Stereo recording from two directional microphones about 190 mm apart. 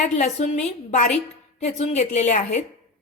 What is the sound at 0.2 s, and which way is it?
A woman's voice, 40° left (ahead or behind).